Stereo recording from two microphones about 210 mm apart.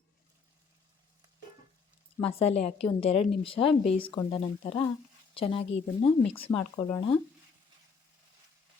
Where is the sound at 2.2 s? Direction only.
30° left (ahead or behind).